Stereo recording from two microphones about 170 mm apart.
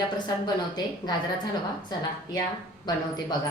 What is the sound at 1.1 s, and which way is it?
Speech, 25° left (ahead or behind).